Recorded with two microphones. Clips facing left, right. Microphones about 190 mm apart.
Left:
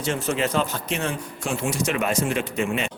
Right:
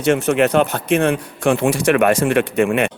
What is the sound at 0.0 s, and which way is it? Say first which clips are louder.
Speech: right 9 dB; 70° right (ahead or behind).